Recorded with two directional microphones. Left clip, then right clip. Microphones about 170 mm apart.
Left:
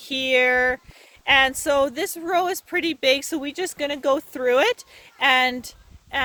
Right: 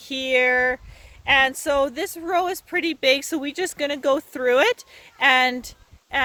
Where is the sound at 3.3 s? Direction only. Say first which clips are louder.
Right 1 dB; 10° right (ahead or behind).